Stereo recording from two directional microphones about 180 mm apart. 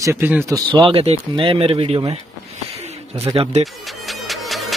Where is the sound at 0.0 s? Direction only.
10° right (ahead or behind).